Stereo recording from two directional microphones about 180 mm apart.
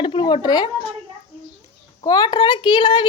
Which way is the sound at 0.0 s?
30° left (ahead or behind).